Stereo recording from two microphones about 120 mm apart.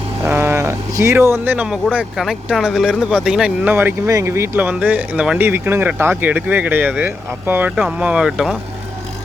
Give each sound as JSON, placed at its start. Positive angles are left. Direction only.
{"t": 0.2, "sound": "vehicle", "side_deg": -20}
{"t": 1.5, "sound": "speech", "side_deg": -10}
{"t": 5.4, "sound": "speech", "side_deg": -20}